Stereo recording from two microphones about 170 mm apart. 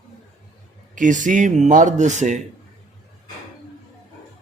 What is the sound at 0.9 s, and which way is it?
Speech, 50° right (ahead or behind).